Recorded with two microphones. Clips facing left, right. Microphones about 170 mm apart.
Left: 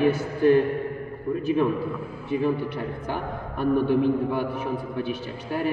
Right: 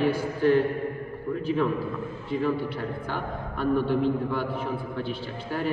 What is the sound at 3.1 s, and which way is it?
A man's voice, 15° left (ahead or behind).